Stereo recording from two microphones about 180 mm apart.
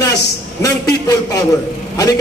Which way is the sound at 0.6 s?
20° left (ahead or behind).